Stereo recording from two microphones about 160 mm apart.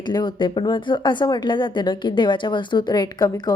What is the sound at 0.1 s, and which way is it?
A woman's voice, 25° left (ahead or behind).